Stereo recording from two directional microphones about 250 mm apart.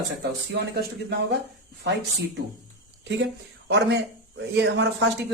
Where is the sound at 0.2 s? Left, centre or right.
Right.